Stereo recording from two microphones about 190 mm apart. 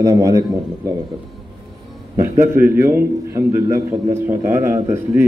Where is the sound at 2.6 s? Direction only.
10° right (ahead or behind).